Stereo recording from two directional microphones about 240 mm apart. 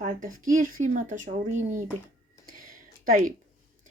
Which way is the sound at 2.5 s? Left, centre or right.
Right.